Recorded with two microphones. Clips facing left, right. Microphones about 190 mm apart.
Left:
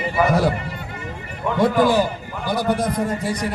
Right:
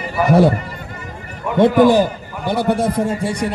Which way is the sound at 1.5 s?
25° right (ahead or behind).